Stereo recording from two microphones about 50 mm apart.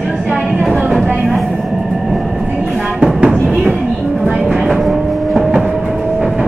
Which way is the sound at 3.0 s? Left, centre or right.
Centre.